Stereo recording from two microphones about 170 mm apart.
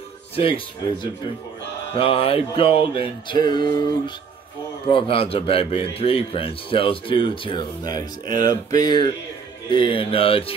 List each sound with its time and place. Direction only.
2.0 s a man's voice: 35° left (ahead or behind)
8.5 s mantra: 25° left (ahead or behind)
9.7 s a man's voice: 30° left (ahead or behind)